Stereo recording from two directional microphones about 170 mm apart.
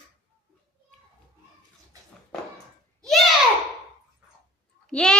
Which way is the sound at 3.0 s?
Centre (ahead or behind).